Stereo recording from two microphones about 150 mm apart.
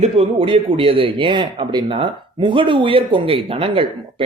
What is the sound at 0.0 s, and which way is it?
Speech, 35° right (ahead or behind).